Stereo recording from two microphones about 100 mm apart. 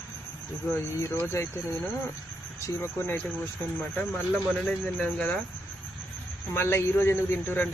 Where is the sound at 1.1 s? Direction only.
25° left (ahead or behind).